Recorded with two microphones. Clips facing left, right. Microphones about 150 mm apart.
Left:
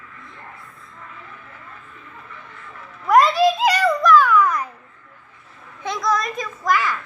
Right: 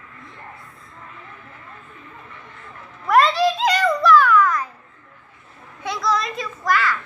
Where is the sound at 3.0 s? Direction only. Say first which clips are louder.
Left 2 dB; 10° left (ahead or behind).